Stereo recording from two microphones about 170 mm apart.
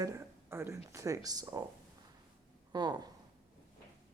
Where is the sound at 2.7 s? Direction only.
25° right (ahead or behind).